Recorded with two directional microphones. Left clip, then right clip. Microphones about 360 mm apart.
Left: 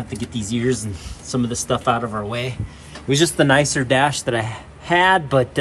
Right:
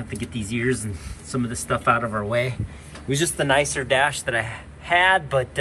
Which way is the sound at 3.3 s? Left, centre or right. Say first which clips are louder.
Left 2 dB; left.